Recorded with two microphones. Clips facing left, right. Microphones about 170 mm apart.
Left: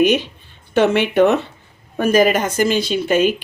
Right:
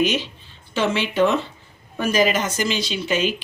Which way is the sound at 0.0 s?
55° left (ahead or behind).